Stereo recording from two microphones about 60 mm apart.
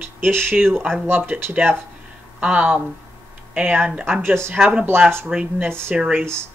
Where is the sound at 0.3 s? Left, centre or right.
Right.